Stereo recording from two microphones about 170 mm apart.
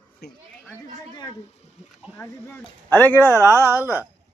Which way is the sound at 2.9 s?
10° left (ahead or behind).